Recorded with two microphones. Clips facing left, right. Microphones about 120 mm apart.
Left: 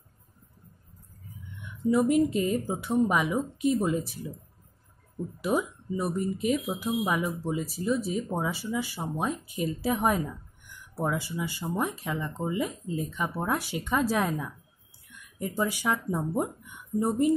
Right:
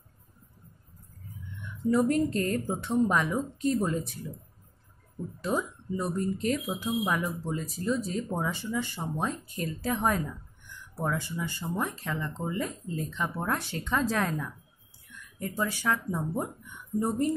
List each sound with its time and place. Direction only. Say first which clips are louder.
1.6 s speech: left 1 dB; 10° left (ahead or behind)
5.4 s speech: left 3 dB; 10° left (ahead or behind)